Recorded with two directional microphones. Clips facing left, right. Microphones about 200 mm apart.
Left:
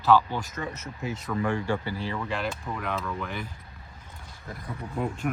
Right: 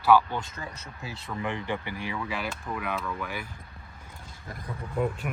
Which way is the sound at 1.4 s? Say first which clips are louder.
Left 3 dB; 20° right (ahead or behind).